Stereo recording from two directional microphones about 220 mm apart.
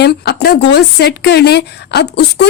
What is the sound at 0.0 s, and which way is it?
Speech, 50° left (ahead or behind).